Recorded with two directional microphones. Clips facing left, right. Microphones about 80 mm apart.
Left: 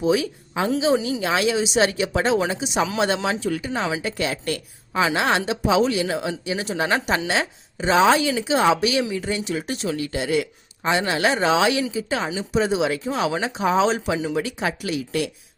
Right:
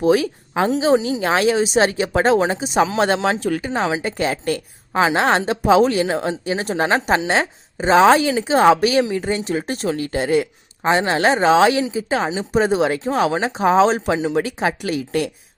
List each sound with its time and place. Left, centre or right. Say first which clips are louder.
0.0 s a woman's voice: right 4 dB; right
1.2 s a woman's voice: right 4 dB; right
3.4 s speech: right 3 dB; right
3.7 s a woman's voice: right 4 dB; right